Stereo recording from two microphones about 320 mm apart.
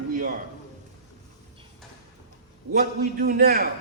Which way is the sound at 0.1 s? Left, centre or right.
Right.